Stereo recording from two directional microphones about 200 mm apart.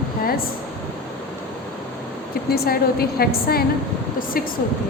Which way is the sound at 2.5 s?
50° left (ahead or behind).